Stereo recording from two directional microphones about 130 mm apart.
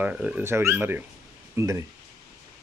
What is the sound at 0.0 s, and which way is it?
Speech, 10° right (ahead or behind).